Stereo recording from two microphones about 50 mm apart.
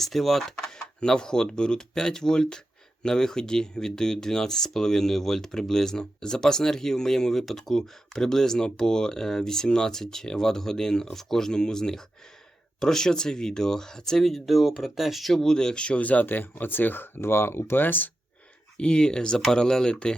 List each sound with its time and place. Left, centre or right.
0.0 s speech: centre
0.6 s speech: centre; by 18.1 s left
18.8 s speech: centre